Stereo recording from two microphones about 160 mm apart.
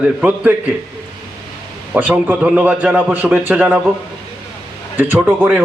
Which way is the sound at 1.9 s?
10° right (ahead or behind).